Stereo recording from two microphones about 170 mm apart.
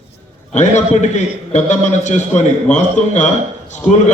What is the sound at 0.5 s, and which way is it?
A man's voice, 45° left (ahead or behind).